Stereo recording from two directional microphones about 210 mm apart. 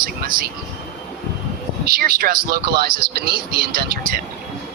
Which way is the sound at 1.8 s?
45° right (ahead or behind).